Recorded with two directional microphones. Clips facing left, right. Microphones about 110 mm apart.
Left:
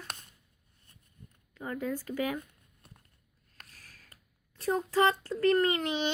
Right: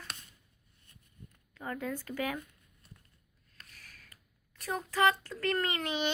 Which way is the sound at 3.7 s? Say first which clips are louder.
Even; 35° left (ahead or behind).